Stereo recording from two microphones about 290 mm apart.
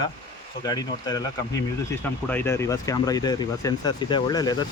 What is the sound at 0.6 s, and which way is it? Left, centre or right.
Speech, centre.